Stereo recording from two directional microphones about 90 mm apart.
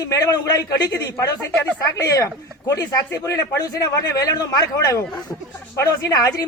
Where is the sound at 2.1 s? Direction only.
40° left (ahead or behind).